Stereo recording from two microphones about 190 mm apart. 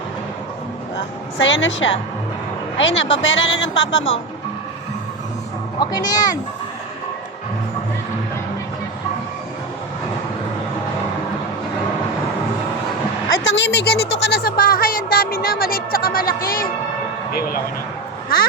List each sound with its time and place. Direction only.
1.4 s a woman's voice: 80° left
5.8 s speech: 20° left (ahead or behind)
13.4 s speech: 75° left (ahead or behind); by 16.6 s 50° left (ahead or behind)